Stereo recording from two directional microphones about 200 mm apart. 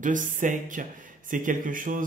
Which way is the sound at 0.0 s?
40° right (ahead or behind).